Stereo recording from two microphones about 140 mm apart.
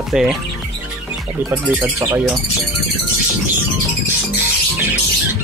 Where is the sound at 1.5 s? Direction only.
20° right (ahead or behind).